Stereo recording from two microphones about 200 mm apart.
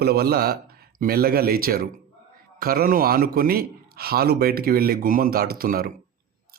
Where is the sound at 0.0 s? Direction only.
50° right (ahead or behind).